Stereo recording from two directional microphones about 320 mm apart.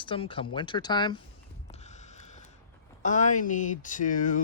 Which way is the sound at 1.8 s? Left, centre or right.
Left.